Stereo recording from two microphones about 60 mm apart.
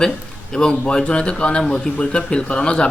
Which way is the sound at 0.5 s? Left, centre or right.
Centre.